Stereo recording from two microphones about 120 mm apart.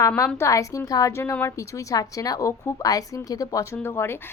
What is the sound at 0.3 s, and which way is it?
A woman's voice, 25° left (ahead or behind).